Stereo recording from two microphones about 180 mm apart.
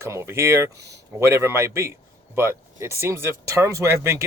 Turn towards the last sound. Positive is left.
turn(degrees=-15)  # may be behind; listen again after turning